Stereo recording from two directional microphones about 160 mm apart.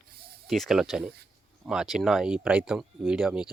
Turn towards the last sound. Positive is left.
turn(degrees=-5)  # may be behind; listen again after turning